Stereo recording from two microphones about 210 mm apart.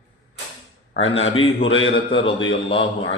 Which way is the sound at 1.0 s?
30° left (ahead or behind).